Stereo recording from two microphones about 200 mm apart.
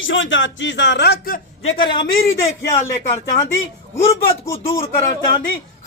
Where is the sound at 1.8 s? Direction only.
25° left (ahead or behind).